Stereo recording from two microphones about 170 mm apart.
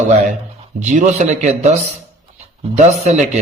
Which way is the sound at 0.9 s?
45° right (ahead or behind).